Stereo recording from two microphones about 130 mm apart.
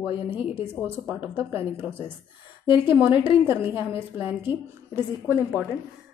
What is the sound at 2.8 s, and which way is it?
A woman's voice, 15° right (ahead or behind).